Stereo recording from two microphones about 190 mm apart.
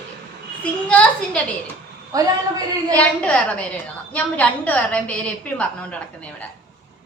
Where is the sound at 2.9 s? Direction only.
5° left (ahead or behind).